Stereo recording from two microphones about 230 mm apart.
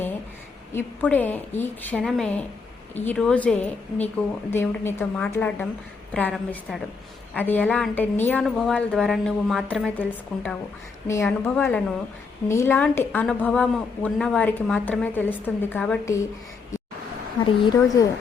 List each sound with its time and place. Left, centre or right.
0.7 s a woman's voice: centre
17.4 s a woman's voice: centre